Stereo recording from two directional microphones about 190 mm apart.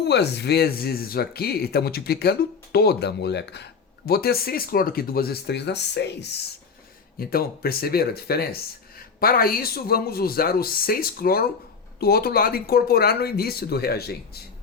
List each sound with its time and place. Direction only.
0.0 s speech: 60° left (ahead or behind)